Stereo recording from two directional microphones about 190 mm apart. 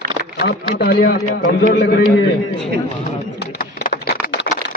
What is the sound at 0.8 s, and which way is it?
A man's voice, 55° left (ahead or behind).